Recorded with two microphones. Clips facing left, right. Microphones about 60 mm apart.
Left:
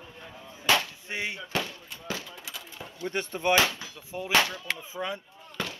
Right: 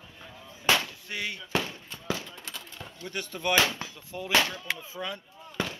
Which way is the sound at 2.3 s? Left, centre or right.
Centre.